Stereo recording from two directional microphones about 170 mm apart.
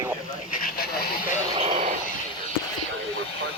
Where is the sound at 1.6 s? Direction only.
35° right (ahead or behind).